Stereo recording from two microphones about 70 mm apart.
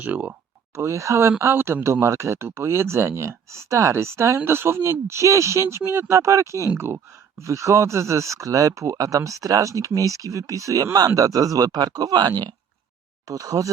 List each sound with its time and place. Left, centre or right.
0.0 s speech: right
0.8 s speech: right
13.2 s speech: right